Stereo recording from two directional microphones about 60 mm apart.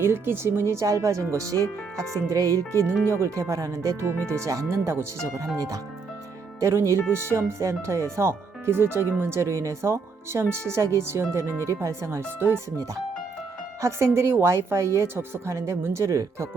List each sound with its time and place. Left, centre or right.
0.0 s speech: right
5.5 s speech: right
6.6 s speech: right
12.4 s speech: right
13.8 s speech: right